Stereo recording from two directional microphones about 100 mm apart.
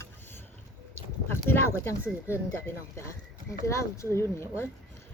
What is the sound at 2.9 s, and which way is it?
Speech, 30° left (ahead or behind).